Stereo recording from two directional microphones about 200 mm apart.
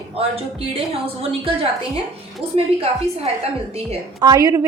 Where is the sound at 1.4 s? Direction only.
30° right (ahead or behind).